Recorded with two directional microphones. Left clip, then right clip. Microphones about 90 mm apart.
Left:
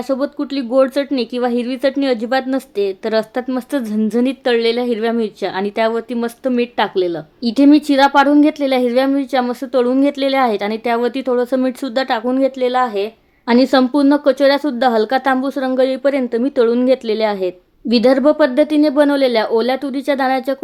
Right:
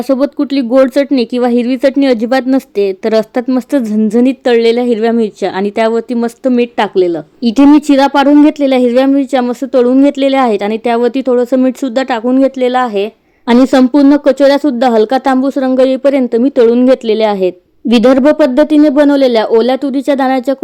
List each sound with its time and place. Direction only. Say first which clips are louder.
0.1 s speech: right 8 dB; 65° right (ahead or behind)
3.4 s a woman's voice: right 7 dB; 55° right (ahead or behind)
12.4 s speech: right 5 dB; 70° right (ahead or behind); by 13.1 s 90° right
13.5 s a woman's voice: right 5 dB; 45° right (ahead or behind)